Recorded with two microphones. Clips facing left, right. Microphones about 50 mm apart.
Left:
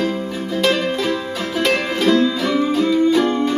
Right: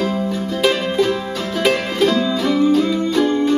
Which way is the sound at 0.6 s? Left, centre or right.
Centre.